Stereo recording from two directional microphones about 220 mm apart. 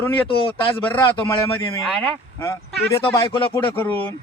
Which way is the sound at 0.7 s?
10° left (ahead or behind).